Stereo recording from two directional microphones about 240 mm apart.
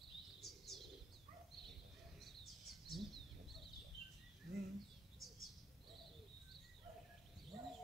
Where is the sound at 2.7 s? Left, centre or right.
Centre.